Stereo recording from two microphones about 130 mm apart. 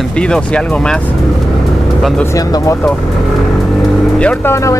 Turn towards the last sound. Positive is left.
turn(degrees=25)  # may be behind; listen again after turning